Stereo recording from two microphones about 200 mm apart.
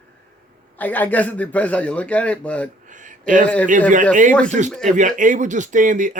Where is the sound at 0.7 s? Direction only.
10° left (ahead or behind).